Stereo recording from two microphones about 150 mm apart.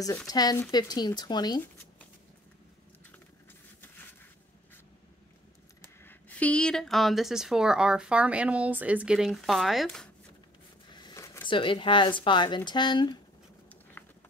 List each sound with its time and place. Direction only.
0.3 s speech: 25° left (ahead or behind)
5.8 s speech: 10° left (ahead or behind)
10.9 s a sound: 30° left (ahead or behind)
11.4 s speech: 35° left (ahead or behind)
14.0 s run: 15° left (ahead or behind)